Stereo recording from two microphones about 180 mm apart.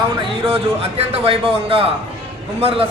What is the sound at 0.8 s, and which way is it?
A man's voice, 35° right (ahead or behind).